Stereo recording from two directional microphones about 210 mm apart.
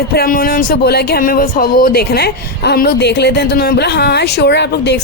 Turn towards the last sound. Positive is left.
turn(degrees=55)  # may be behind; listen again after turning